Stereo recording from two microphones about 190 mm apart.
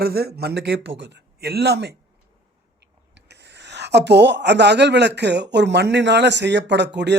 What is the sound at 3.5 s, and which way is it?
Speech, 65° right (ahead or behind).